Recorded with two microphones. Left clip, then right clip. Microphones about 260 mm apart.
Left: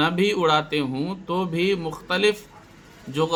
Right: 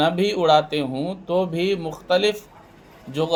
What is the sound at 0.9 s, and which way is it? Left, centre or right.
Speech, left.